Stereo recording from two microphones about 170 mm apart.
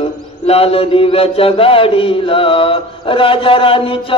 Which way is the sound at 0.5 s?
35° left (ahead or behind).